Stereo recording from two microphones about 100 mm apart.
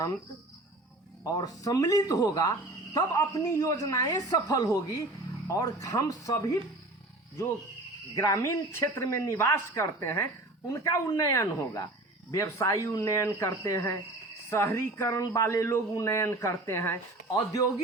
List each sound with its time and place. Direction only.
1.2 s speech: 40° left (ahead or behind)
8.1 s speech: 35° left (ahead or behind)